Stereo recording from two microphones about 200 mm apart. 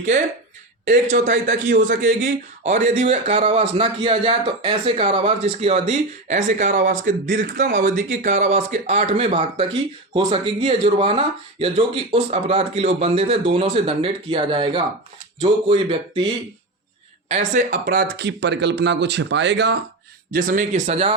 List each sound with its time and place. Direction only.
1.1 s a man's voice: 40° right (ahead or behind)
17.2 s speech: 35° right (ahead or behind); by 19.7 s 60° right (ahead or behind)
20.3 s a man's voice: 45° right (ahead or behind)